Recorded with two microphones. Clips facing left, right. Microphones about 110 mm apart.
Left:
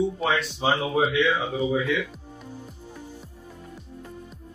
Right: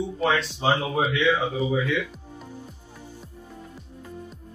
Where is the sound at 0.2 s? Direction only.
Centre (ahead or behind).